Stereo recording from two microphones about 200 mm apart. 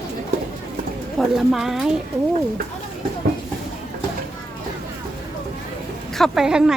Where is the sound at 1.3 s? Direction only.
Centre (ahead or behind).